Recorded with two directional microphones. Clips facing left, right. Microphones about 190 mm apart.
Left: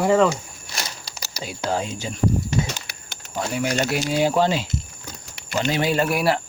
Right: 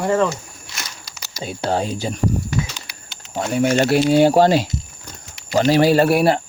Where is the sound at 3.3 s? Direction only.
30° right (ahead or behind).